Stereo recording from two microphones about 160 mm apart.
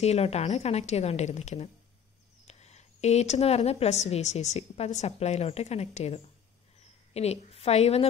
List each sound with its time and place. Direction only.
0.0 s a woman's voice: 40° left (ahead or behind)